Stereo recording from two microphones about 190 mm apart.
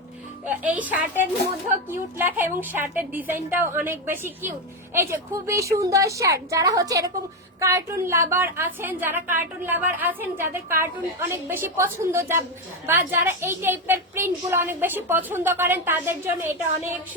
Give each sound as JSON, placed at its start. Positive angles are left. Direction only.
{"t": 0.4, "sound": "a woman's voice", "side_deg": -10}